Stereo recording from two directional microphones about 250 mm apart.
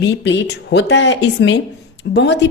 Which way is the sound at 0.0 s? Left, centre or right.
Left.